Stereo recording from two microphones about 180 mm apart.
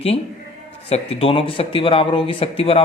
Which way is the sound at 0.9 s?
35° left (ahead or behind).